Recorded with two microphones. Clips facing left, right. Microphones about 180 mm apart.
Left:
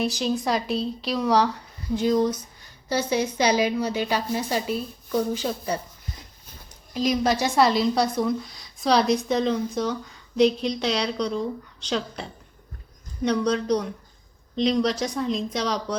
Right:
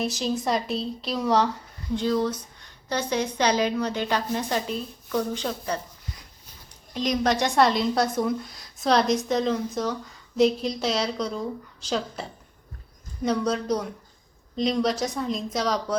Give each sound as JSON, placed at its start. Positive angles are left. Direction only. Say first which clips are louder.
{"t": 0.0, "sound": "a woman's voice", "louder": "left 2 dB", "side_deg": 0}
{"t": 2.0, "sound": "a woman's voice", "louder": "left 3 dB", "side_deg": 15}
{"t": 6.9, "sound": "a woman's voice", "louder": "left 1 dB", "side_deg": 5}
{"t": 13.2, "sound": "a woman's voice", "louder": "left 2 dB", "side_deg": -5}